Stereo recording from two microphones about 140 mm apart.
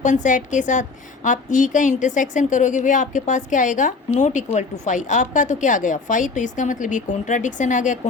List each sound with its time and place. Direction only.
0.0 s a woman's voice: 60° left (ahead or behind)